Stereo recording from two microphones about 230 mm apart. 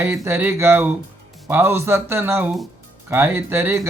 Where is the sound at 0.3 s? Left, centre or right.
Centre.